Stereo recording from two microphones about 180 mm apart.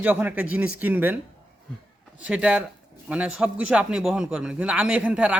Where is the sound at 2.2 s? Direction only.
5° right (ahead or behind).